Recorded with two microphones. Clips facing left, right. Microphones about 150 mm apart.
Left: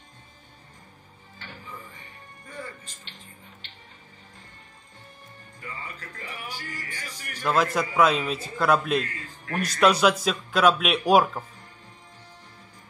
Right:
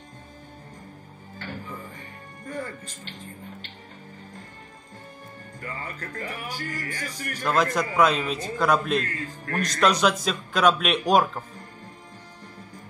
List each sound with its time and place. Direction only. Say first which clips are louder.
5.6 s speech: right 4 dB; 45° right (ahead or behind)
7.4 s a man's voice: even; 5° left (ahead or behind)